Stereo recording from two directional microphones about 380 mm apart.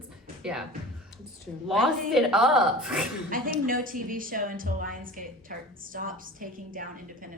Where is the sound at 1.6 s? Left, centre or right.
Centre.